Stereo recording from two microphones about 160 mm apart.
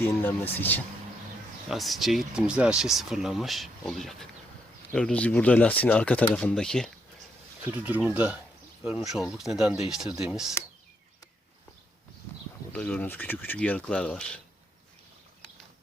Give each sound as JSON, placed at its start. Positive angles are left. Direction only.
{"t": 0.2, "sound": "speech", "side_deg": 15}
{"t": 1.7, "sound": "speech", "side_deg": 0}
{"t": 7.9, "sound": "speech", "side_deg": -10}
{"t": 12.7, "sound": "speech", "side_deg": 5}